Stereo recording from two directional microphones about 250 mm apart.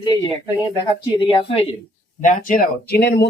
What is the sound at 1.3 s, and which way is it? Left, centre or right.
Speech, centre.